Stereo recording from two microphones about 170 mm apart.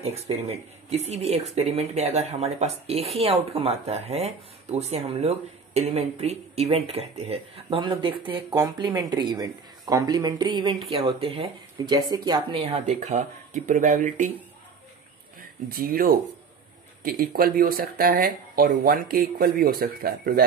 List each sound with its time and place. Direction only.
0.0 s speech: 35° right (ahead or behind)
12.8 s speech: 45° right (ahead or behind)
15.8 s speech: 60° right (ahead or behind)